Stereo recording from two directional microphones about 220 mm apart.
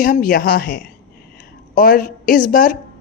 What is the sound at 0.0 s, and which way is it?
Speech, 40° left (ahead or behind).